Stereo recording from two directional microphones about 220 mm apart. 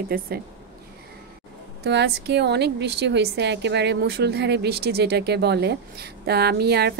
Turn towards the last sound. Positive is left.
turn(degrees=-45)  # may be behind; listen again after turning